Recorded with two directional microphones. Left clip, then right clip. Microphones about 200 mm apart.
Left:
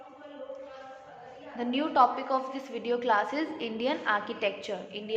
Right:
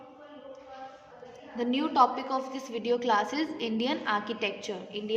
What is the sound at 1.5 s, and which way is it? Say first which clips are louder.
A woman's voice: even; 15° right (ahead or behind).